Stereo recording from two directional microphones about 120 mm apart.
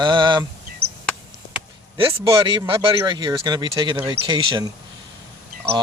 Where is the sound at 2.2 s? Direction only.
40° right (ahead or behind).